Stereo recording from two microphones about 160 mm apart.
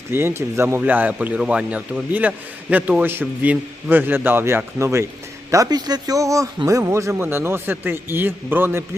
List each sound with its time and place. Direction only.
0.1 s speech: 15° right (ahead or behind)